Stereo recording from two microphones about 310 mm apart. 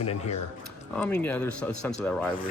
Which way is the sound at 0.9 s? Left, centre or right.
Centre.